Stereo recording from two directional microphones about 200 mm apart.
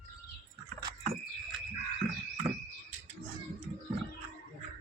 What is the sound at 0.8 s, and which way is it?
Keys jangling, 20° right (ahead or behind).